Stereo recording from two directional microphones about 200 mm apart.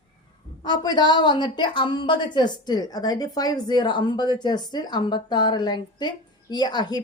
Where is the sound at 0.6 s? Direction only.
20° left (ahead or behind).